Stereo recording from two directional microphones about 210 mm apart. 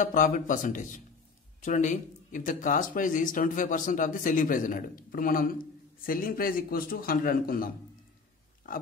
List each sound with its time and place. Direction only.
0.0 s a man's voice: 40° left (ahead or behind)